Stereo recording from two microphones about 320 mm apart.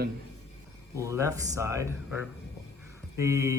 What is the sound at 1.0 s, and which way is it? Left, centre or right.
Speech, centre.